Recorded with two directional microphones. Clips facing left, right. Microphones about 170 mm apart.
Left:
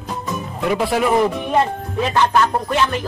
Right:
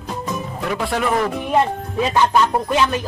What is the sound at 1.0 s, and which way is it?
Speech, 20° left (ahead or behind).